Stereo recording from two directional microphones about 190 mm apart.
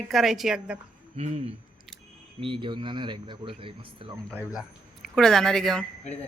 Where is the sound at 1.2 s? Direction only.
35° right (ahead or behind).